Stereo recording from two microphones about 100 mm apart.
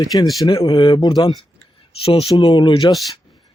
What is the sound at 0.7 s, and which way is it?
Speech, 55° left (ahead or behind).